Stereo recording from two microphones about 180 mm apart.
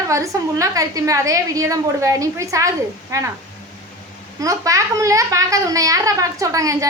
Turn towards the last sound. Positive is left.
turn(degrees=-20)  # may be behind; listen again after turning